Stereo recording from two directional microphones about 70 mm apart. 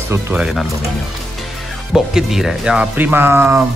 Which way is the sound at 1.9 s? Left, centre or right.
Centre.